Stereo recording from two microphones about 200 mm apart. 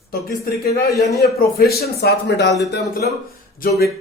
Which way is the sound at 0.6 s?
50° left (ahead or behind).